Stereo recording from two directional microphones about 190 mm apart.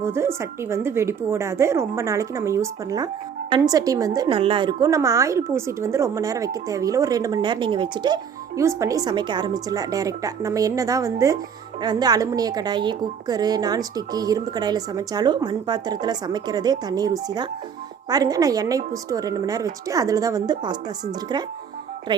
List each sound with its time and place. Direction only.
0.0 s a woman's voice: 15° right (ahead or behind)